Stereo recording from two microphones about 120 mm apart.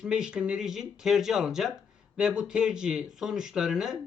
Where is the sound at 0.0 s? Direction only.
5° right (ahead or behind).